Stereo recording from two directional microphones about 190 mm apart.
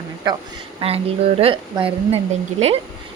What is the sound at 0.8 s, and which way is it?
A woman's voice, 30° right (ahead or behind).